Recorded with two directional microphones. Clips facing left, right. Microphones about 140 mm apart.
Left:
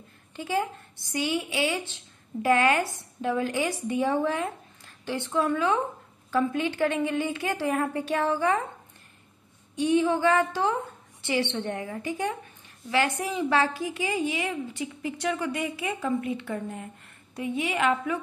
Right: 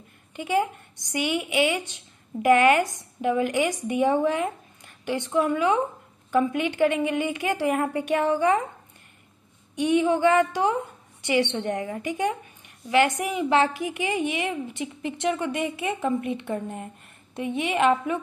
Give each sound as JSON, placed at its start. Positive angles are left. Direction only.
{"t": 0.4, "sound": "speech", "side_deg": -15}
{"t": 9.8, "sound": "a woman's voice", "side_deg": -15}